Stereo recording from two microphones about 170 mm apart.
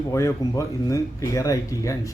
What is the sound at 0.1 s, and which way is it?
A man's voice, 15° left (ahead or behind).